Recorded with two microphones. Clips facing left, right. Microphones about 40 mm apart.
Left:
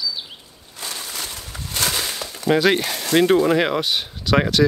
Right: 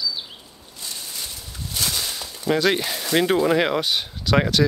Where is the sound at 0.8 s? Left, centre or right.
Left.